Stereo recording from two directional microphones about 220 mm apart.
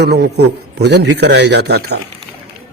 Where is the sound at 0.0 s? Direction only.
50° right (ahead or behind).